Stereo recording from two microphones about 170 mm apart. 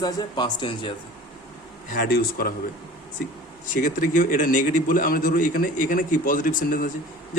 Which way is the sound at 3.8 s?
50° left (ahead or behind).